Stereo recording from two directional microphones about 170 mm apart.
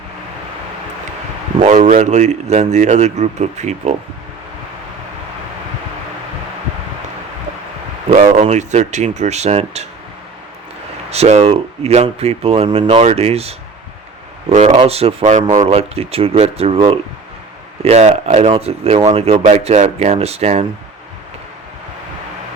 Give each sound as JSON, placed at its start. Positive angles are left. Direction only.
{"t": 1.5, "sound": "a man's voice", "side_deg": -45}
{"t": 8.4, "sound": "speech", "side_deg": -40}
{"t": 11.1, "sound": "speech", "side_deg": -40}